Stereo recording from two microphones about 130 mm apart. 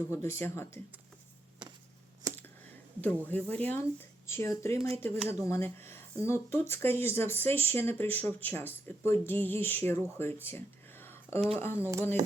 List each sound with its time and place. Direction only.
0.1 s speech: 20° left (ahead or behind)
2.2 s a sound: 25° right (ahead or behind)
3.0 s speech: 10° left (ahead or behind)
11.0 s a sound: 15° left (ahead or behind)
11.3 s speech: 50° right (ahead or behind)
11.6 s speech: 20° left (ahead or behind)